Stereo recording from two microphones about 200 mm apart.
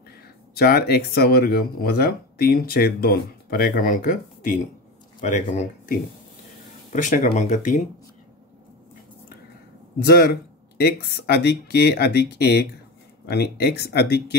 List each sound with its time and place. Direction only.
0.6 s speech: 50° left (ahead or behind)
9.9 s speech: 55° left (ahead or behind)